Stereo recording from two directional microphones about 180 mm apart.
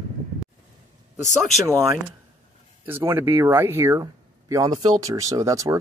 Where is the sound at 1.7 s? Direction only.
15° right (ahead or behind).